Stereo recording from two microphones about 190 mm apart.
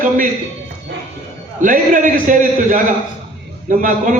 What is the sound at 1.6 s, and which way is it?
A man's voice, 45° right (ahead or behind).